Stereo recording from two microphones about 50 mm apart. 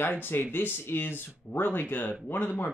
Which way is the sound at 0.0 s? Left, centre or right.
Left.